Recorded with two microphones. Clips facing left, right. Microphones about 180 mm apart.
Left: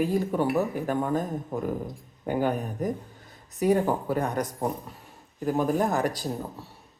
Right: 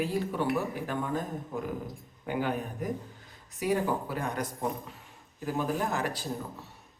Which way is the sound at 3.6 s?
45° left (ahead or behind).